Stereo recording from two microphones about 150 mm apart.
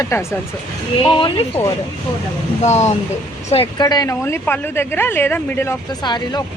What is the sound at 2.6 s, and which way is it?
Speech, 50° left (ahead or behind).